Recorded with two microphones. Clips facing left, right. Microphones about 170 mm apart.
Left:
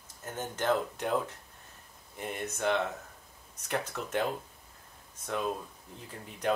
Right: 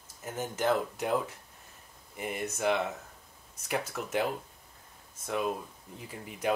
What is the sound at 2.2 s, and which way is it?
Speech, 5° right (ahead or behind).